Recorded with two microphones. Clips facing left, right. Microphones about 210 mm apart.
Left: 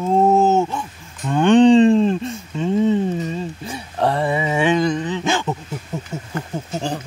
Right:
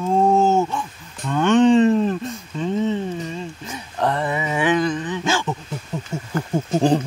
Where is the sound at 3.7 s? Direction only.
30° left (ahead or behind).